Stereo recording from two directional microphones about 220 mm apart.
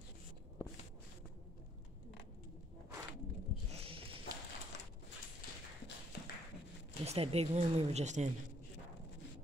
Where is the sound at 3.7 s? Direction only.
25° right (ahead or behind).